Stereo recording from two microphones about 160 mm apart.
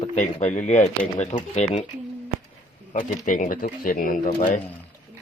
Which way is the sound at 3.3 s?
55° left (ahead or behind).